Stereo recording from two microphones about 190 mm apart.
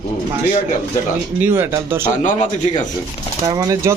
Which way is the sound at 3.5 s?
20° right (ahead or behind).